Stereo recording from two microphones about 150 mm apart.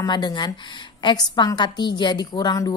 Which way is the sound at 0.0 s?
30° left (ahead or behind).